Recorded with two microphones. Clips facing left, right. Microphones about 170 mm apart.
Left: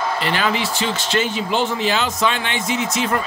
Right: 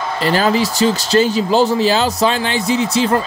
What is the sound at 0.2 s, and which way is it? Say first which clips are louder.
A man's voice: right 10 dB; 35° right (ahead or behind).